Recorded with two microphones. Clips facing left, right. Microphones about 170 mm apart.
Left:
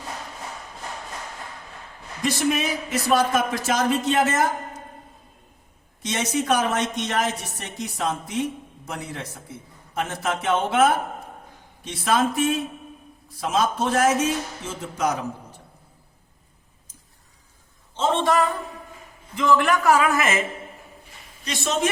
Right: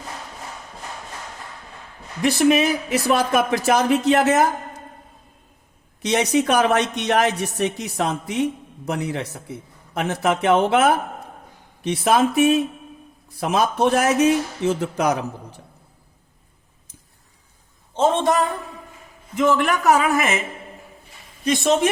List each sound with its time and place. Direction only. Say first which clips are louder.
2.2 s speech: right 6 dB; 65° right (ahead or behind)
6.0 s speech: right 6 dB; 70° right (ahead or behind)
19.5 s speech: even; 20° right (ahead or behind)
21.4 s speech: right 7 dB; 55° right (ahead or behind)